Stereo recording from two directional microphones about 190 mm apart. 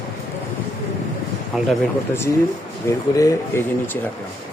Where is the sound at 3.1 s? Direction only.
15° left (ahead or behind).